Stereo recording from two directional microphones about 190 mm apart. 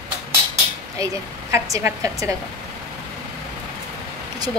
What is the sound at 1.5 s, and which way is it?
Speech, 15° right (ahead or behind).